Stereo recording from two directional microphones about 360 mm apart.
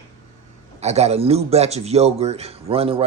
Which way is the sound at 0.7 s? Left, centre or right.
Centre.